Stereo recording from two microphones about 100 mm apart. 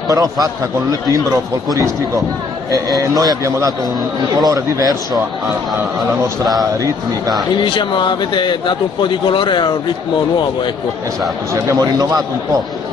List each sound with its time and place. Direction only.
0.1 s a man's voice: 35° right (ahead or behind)
6.4 s a man's voice: 40° right (ahead or behind)
7.6 s speech: 55° left (ahead or behind)
11.5 s a man's voice: 35° right (ahead or behind)